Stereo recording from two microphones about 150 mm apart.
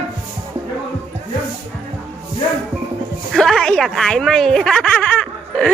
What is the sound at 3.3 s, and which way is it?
A woman's voice, 5° left (ahead or behind).